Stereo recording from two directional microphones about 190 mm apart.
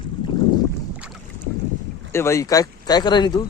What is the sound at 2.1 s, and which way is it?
Speech, 15° left (ahead or behind).